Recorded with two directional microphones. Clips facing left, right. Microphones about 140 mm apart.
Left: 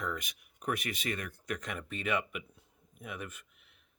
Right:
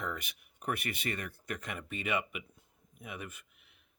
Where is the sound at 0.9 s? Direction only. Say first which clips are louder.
Left 1 dB; centre (ahead or behind).